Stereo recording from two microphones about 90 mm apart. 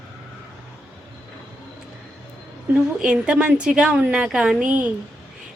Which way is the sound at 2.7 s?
15° right (ahead or behind).